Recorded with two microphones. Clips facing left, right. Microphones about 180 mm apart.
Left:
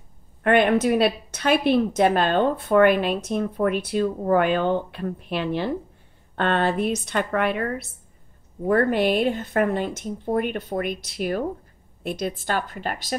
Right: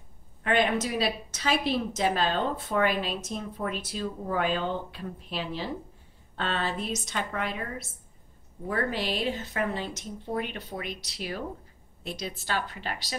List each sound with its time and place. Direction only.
0.4 s a woman's voice: 60° left (ahead or behind)